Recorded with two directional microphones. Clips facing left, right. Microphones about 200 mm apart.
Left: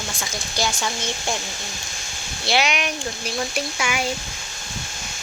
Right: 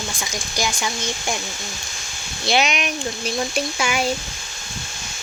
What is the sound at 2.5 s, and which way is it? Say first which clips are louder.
Speech: right 1 dB; 20° right (ahead or behind).